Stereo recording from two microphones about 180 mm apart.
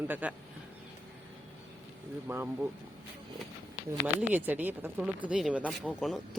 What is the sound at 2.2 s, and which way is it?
Speech, 10° right (ahead or behind).